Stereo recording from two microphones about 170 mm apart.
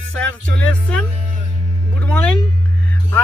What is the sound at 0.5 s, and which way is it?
Speech, 5° left (ahead or behind).